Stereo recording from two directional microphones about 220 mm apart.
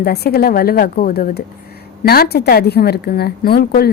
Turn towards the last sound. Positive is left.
turn(degrees=45)  # may be behind; listen again after turning